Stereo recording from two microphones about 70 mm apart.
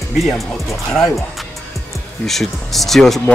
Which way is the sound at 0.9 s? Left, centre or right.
Centre.